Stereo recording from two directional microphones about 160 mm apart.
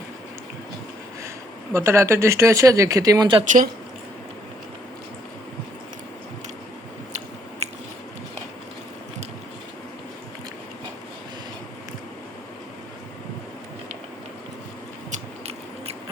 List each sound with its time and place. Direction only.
1.7 s speech: 20° right (ahead or behind)
3.4 s speech: 55° right (ahead or behind)
15.1 s biting: 40° right (ahead or behind)